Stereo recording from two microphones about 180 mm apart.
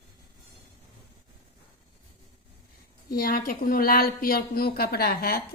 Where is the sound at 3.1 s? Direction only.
55° left (ahead or behind).